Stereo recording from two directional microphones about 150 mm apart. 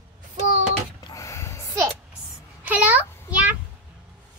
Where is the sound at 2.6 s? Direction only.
10° right (ahead or behind).